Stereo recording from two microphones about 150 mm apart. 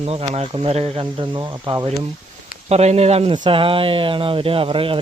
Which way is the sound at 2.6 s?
45° right (ahead or behind).